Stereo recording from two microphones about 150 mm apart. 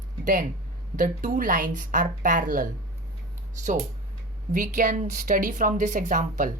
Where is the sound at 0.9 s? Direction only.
60° right (ahead or behind).